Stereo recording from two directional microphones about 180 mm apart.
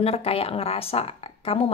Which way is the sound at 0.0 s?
35° left (ahead or behind).